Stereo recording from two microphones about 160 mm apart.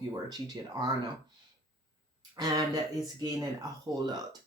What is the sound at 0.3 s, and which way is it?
Speech, 25° right (ahead or behind).